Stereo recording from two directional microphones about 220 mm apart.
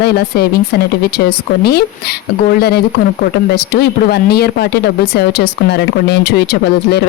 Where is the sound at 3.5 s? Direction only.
45° left (ahead or behind).